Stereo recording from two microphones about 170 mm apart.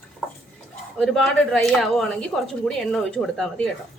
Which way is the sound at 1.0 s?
Centre (ahead or behind).